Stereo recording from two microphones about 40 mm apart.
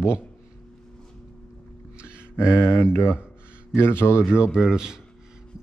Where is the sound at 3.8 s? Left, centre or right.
Left.